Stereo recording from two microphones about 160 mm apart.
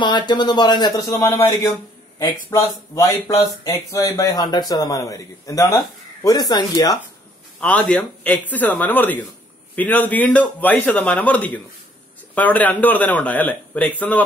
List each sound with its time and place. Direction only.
0.0 s speech: 30° left (ahead or behind)
7.6 s a man's voice: 10° left (ahead or behind)